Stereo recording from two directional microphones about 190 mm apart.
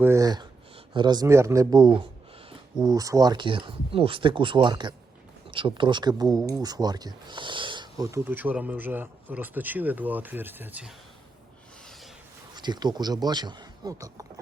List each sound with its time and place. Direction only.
0.0 s speech: 15° right (ahead or behind)
11.9 s a sound: centre (ahead or behind)
12.5 s speech: 20° right (ahead or behind)